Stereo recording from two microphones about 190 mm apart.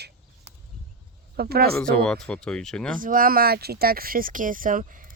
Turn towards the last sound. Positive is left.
turn(degrees=-45)  # may be behind; listen again after turning